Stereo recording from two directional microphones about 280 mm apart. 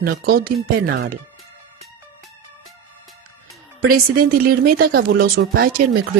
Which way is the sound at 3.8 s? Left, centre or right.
Right.